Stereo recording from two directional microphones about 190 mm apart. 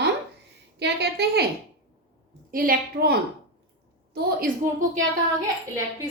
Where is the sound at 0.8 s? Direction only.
60° right (ahead or behind).